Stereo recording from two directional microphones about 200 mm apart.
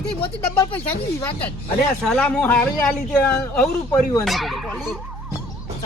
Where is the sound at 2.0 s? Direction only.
5° left (ahead or behind).